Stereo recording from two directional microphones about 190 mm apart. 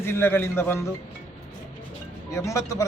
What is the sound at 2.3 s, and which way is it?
Speech, 15° left (ahead or behind).